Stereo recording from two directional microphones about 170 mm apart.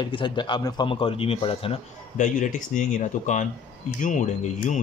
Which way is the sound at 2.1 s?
45° left (ahead or behind).